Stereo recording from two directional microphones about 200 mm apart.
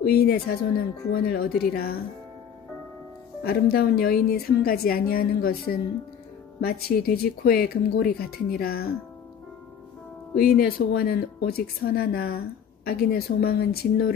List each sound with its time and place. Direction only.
0.0 s speech: 50° left (ahead or behind)
3.4 s speech: 50° left (ahead or behind)
10.3 s speech: 50° left (ahead or behind)